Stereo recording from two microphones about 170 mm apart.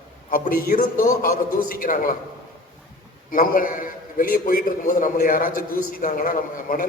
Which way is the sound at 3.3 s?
55° left (ahead or behind).